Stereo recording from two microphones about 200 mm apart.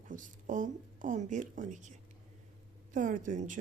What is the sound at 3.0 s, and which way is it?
Speech, 40° right (ahead or behind).